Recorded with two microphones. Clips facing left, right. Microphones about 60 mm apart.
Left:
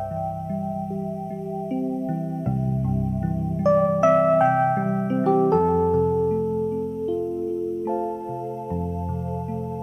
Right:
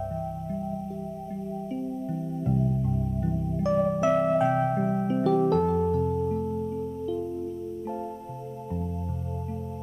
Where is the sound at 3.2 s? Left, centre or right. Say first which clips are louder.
Left 7 dB; left.